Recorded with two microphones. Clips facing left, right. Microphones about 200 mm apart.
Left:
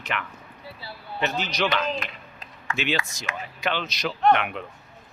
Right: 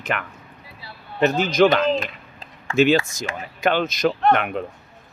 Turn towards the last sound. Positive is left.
turn(degrees=-45)  # may be behind; listen again after turning